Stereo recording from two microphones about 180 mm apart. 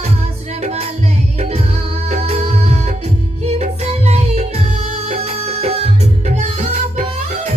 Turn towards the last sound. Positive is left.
turn(degrees=-40)  # may be behind; listen again after turning